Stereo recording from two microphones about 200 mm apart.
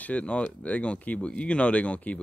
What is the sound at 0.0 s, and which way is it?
Speech, 5° left (ahead or behind).